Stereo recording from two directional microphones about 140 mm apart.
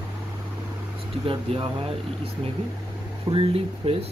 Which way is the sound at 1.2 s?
40° right (ahead or behind).